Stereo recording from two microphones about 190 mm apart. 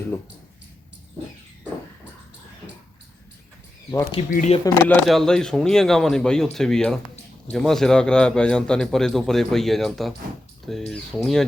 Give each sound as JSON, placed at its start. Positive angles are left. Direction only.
{"t": 4.3, "sound": "speech", "side_deg": 45}
{"t": 4.6, "sound": "speech", "side_deg": 15}
{"t": 5.0, "sound": "a man's voice", "side_deg": 0}